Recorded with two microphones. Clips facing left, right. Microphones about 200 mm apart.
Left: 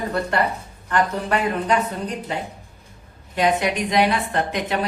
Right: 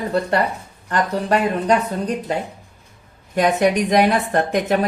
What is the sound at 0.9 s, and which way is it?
Speech, 40° right (ahead or behind).